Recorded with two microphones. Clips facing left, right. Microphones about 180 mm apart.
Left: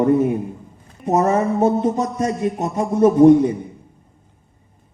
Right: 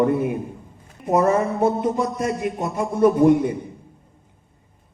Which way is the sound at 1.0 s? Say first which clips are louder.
Left 2 dB; centre (ahead or behind).